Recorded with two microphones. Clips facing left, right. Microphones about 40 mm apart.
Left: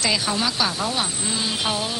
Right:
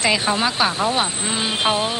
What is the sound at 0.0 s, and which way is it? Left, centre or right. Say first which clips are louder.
Speech: right 4 dB; right.